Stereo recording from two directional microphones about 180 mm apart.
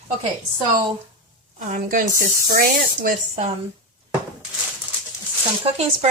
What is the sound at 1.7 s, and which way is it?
Speech, 45° right (ahead or behind).